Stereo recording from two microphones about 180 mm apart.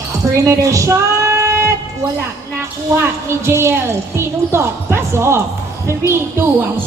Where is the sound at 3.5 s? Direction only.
15° right (ahead or behind).